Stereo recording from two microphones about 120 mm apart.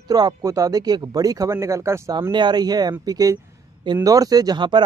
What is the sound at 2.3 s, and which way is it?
Speech, 40° right (ahead or behind).